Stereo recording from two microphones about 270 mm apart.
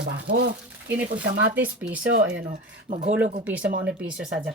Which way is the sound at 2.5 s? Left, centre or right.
Right.